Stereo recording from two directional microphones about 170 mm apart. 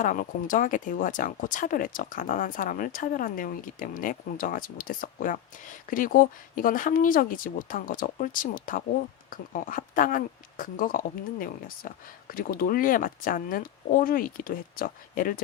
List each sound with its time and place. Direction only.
0.0 s speech: 50° left (ahead or behind)